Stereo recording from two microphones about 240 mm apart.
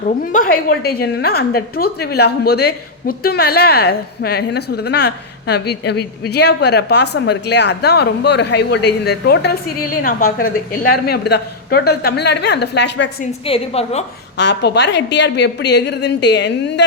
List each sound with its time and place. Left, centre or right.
0.3 s a woman's voice: left
13.4 s a woman's voice: left
14.3 s a woman's voice: left